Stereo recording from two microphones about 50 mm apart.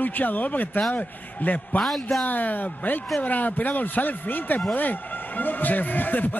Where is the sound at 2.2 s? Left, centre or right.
Left.